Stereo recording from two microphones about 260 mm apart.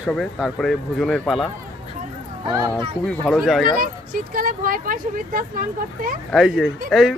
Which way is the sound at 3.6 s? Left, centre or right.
Right.